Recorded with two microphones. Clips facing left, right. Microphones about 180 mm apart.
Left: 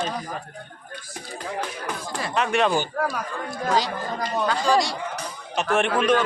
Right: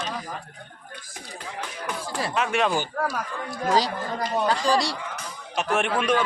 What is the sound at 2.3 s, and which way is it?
Speech, 5° right (ahead or behind).